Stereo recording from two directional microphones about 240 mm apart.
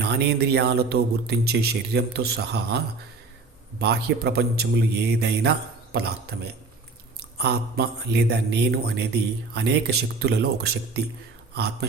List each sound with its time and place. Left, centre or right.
0.0 s speech: right